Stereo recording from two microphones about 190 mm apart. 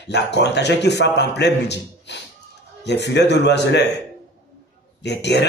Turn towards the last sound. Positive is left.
turn(degrees=65)  # may be behind; listen again after turning